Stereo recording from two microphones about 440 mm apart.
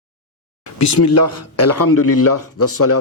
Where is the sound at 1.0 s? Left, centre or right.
Left.